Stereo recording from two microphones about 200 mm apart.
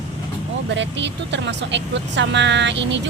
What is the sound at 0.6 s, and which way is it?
Speech, 65° right (ahead or behind).